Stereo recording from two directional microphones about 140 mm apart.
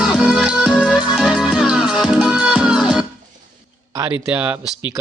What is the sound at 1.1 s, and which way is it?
Music, 5° right (ahead or behind).